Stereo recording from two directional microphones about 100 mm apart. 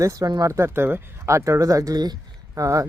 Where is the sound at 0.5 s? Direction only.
25° right (ahead or behind).